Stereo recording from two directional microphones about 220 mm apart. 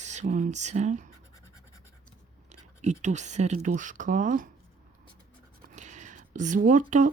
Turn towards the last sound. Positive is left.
turn(degrees=-35)  # may be behind; listen again after turning